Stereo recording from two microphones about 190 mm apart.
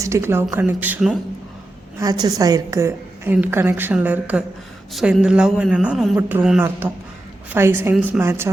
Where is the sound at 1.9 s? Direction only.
20° right (ahead or behind).